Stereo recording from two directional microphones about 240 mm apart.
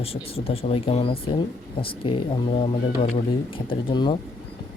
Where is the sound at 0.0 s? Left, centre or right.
Left.